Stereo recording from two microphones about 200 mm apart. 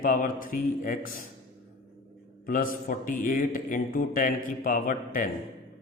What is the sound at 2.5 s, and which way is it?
A man's voice, 45° left (ahead or behind).